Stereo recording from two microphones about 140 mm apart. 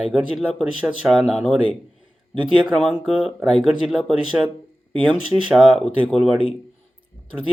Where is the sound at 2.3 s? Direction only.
35° right (ahead or behind).